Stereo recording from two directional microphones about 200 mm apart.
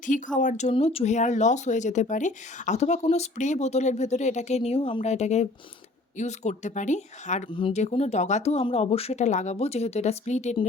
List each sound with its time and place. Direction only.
0.0 s speech: 40° left (ahead or behind)